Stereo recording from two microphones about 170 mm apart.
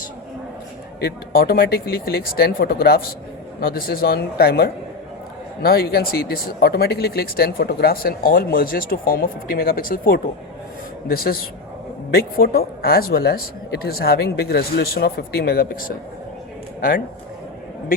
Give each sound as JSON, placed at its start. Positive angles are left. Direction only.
{"t": 1.0, "sound": "speech", "side_deg": 65}